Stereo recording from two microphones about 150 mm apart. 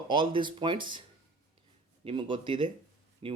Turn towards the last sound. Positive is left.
turn(degrees=-35)  # may be behind; listen again after turning